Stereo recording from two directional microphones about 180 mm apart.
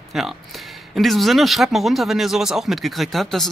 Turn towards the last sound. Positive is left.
turn(degrees=0)  # may be behind; listen again after turning